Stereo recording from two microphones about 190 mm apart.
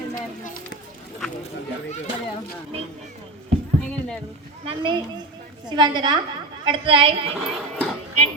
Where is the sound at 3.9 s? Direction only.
5° left (ahead or behind).